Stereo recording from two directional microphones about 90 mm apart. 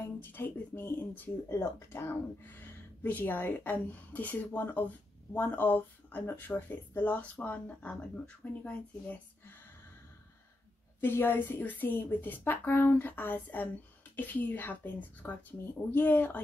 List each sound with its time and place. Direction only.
0.0 s speech: 25° left (ahead or behind)
11.0 s speech: 25° left (ahead or behind)